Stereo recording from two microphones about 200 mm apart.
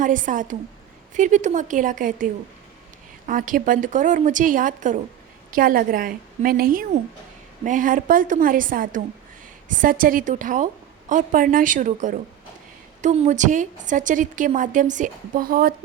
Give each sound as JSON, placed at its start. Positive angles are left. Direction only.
{"t": 0.0, "sound": "a woman's voice", "side_deg": -40}